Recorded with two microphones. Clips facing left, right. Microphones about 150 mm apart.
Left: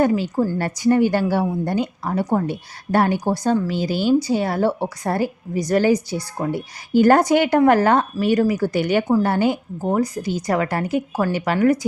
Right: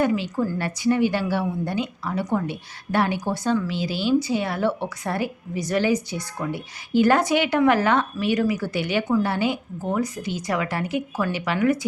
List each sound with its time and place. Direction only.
0.0 s a woman's voice: 40° left (ahead or behind)